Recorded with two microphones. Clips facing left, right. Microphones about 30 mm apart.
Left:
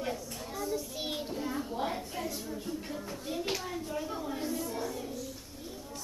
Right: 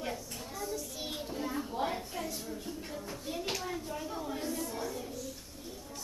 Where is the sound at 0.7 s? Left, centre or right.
Centre.